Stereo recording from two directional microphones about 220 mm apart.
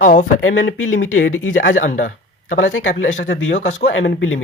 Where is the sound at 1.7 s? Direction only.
35° left (ahead or behind).